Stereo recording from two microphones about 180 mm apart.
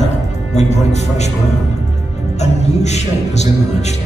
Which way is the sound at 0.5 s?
40° left (ahead or behind).